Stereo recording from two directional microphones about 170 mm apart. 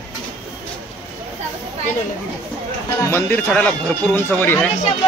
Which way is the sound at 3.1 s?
10° left (ahead or behind).